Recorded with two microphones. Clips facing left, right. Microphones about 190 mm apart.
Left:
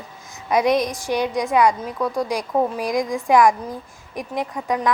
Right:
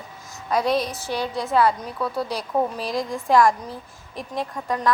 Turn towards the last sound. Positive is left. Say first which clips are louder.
# left 2 dB
turn(degrees=15)  # may be behind; listen again after turning